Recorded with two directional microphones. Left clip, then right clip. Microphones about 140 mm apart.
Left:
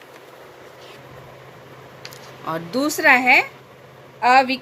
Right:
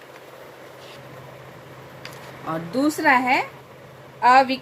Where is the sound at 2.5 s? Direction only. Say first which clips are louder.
Left 1 dB; 45° left (ahead or behind).